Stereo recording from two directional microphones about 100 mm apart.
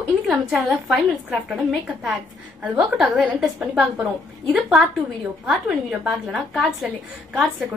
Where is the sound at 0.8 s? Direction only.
Centre (ahead or behind).